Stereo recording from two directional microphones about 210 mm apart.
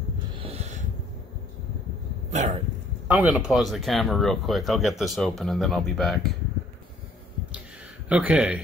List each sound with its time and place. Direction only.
0.4 s snort: 30° right (ahead or behind)
2.3 s a sound: 30° right (ahead or behind)
3.1 s speech: 5° right (ahead or behind)
8.1 s a man's voice: 5° right (ahead or behind)